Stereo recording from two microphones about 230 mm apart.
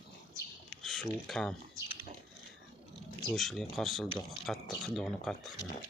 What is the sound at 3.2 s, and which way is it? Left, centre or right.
Speech, centre.